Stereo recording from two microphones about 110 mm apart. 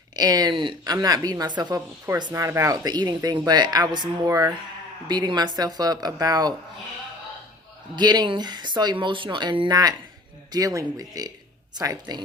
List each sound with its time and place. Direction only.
0.2 s speech: 35° right (ahead or behind)
2.3 s speech: 25° right (ahead or behind)
7.9 s speech: 40° right (ahead or behind)